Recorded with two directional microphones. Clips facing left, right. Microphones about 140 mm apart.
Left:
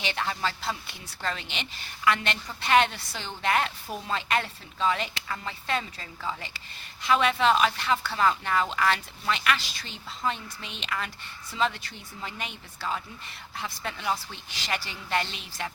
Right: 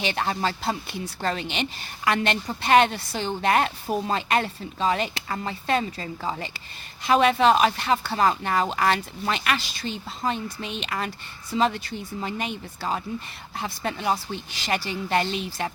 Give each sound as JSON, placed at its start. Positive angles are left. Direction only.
{"t": 0.0, "sound": "a woman's voice", "side_deg": -45}